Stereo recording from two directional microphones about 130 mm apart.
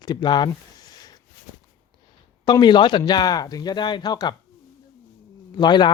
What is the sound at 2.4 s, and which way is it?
Speech, 35° left (ahead or behind).